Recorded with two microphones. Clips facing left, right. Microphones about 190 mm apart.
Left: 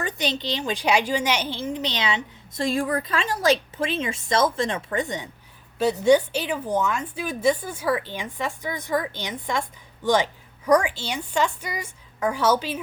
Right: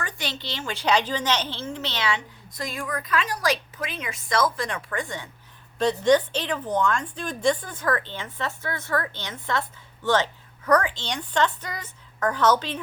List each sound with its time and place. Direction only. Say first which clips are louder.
0.0 s a woman's voice: left 6 dB; 20° left (ahead or behind)
5.8 s a woman's voice: left 2 dB; 10° left (ahead or behind)